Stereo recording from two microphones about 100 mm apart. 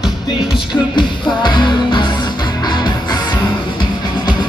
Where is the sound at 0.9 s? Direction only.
50° left (ahead or behind).